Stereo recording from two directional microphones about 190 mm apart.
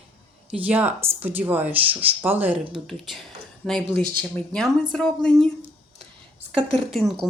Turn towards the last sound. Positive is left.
turn(degrees=0)  # may be behind; listen again after turning